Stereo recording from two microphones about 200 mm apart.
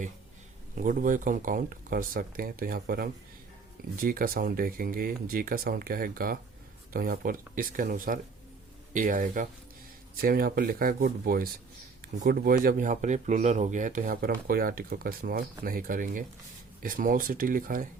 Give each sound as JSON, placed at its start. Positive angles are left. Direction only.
{"t": 0.8, "sound": "speech", "side_deg": -40}